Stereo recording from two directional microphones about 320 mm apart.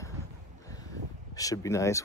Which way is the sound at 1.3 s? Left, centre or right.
Centre.